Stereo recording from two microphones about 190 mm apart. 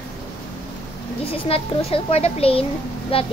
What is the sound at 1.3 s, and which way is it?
A child's voice, 30° left (ahead or behind).